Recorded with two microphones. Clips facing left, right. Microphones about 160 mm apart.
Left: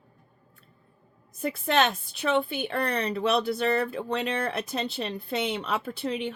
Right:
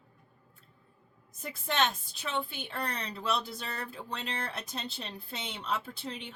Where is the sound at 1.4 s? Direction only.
70° left (ahead or behind).